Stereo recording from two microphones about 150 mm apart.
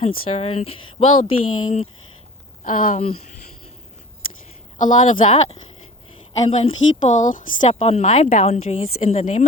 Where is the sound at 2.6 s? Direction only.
65° left (ahead or behind).